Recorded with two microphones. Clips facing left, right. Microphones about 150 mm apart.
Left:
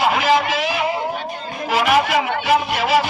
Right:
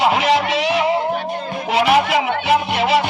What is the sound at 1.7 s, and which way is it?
Music, 25° right (ahead or behind).